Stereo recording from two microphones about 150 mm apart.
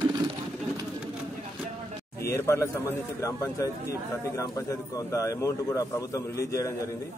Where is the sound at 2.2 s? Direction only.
20° left (ahead or behind).